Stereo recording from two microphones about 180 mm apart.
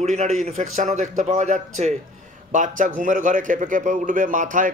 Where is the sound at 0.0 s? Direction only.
40° right (ahead or behind).